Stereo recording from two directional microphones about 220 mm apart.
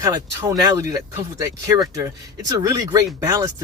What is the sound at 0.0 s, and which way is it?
Speech, 15° right (ahead or behind).